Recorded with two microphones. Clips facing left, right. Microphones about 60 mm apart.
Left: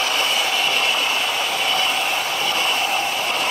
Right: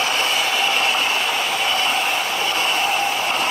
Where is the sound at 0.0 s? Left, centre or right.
Centre.